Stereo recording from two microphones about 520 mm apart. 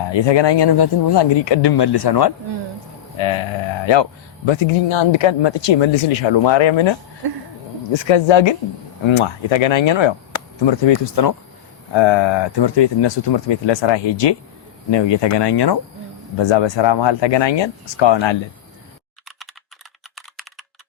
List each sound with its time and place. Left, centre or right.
0.1 s speech: left
3.2 s speech: left
7.9 s speech: left
11.9 s speech: left